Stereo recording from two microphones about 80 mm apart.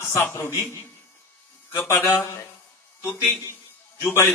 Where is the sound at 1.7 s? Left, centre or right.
Left.